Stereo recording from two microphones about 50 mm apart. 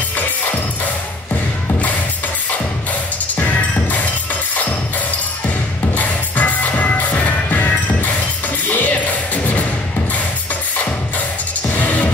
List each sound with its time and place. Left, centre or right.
3.3 s music: left
5.9 s music: left
11.7 s music: left